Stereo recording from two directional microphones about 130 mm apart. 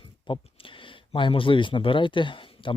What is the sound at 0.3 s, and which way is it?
Speech, 40° left (ahead or behind).